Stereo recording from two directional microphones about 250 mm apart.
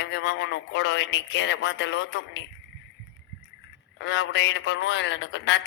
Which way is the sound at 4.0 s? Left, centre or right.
Left.